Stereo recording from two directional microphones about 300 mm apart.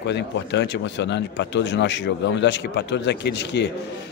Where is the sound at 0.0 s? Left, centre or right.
Left.